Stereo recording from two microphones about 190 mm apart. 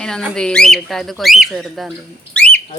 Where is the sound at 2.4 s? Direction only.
5° left (ahead or behind).